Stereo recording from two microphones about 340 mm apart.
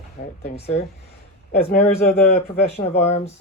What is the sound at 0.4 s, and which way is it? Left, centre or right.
Speech, left.